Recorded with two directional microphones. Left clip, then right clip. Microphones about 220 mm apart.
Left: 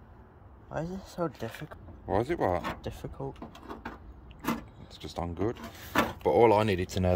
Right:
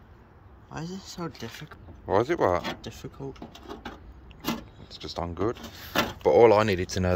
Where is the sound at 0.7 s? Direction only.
35° left (ahead or behind).